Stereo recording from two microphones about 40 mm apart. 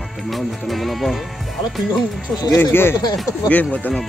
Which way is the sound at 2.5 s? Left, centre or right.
Left.